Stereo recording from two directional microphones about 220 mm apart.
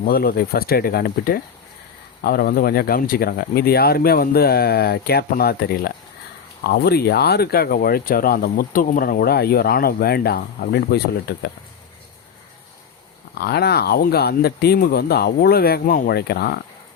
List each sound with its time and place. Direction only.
0.0 s speech: 40° left (ahead or behind)
13.4 s speech: 45° left (ahead or behind)